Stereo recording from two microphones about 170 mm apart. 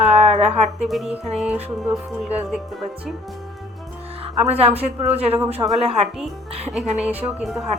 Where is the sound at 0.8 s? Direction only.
Centre (ahead or behind).